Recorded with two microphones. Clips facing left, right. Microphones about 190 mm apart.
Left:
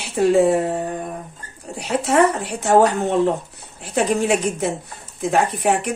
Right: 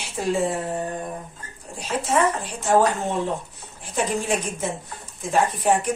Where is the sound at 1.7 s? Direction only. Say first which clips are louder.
Left 5 dB; 70° left (ahead or behind).